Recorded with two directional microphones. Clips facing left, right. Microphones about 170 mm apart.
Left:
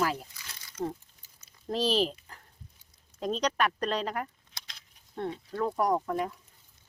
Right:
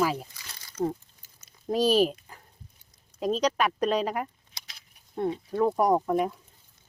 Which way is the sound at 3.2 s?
5° right (ahead or behind).